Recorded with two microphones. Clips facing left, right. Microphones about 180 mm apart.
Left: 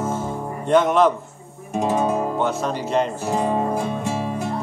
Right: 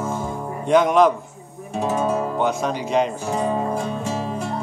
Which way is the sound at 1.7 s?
15° left (ahead or behind).